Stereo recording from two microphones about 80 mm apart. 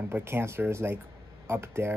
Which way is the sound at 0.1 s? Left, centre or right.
Right.